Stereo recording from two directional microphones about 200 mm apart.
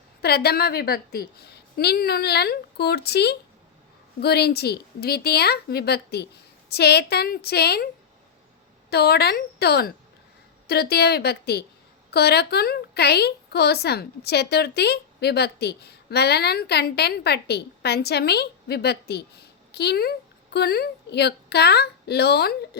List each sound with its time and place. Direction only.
0.2 s a woman's voice: 55° left (ahead or behind)
8.9 s a woman's voice: 55° left (ahead or behind)